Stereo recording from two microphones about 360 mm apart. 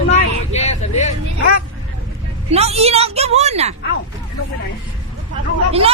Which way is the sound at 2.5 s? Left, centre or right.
Centre.